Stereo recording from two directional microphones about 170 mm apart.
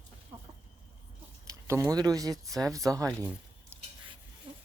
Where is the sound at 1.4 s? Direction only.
20° right (ahead or behind).